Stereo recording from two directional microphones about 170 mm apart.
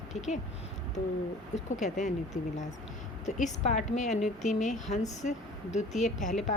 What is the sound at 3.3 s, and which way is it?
A woman's voice, 45° left (ahead or behind).